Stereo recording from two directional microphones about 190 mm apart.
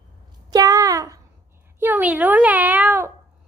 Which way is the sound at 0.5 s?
20° right (ahead or behind).